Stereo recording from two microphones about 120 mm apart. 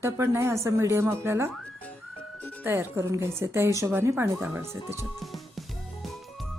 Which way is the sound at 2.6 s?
20° right (ahead or behind).